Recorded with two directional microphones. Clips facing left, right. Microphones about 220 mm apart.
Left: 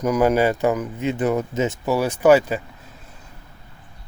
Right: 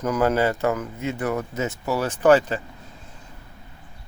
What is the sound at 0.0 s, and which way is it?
Speech, 15° left (ahead or behind).